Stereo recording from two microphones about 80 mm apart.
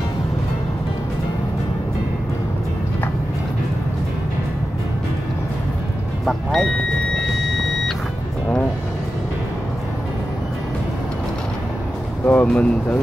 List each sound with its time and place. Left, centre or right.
6.2 s vehicle: centre
12.3 s speech: centre